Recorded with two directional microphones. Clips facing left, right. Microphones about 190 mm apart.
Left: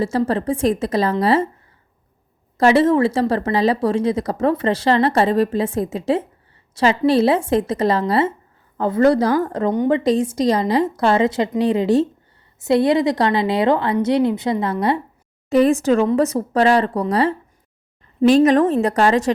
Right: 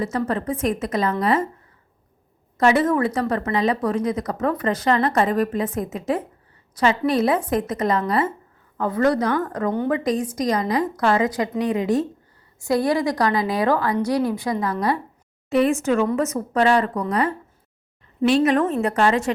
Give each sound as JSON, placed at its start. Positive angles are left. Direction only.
{"t": 0.0, "sound": "speech", "side_deg": 30}
{"t": 2.6, "sound": "speech", "side_deg": 30}
{"t": 15.4, "sound": "speech", "side_deg": 40}